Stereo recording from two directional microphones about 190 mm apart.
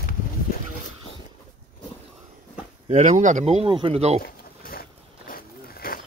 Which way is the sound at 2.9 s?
40° right (ahead or behind).